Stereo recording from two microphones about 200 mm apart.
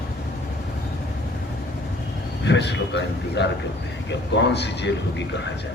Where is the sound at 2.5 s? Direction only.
60° left (ahead or behind).